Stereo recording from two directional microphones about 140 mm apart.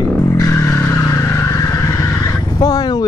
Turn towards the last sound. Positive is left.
turn(degrees=30)  # may be behind; listen again after turning